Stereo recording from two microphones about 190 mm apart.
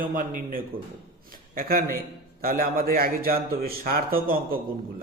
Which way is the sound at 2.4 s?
50° right (ahead or behind).